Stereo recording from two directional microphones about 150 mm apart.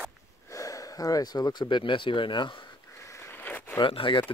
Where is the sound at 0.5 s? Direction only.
20° left (ahead or behind).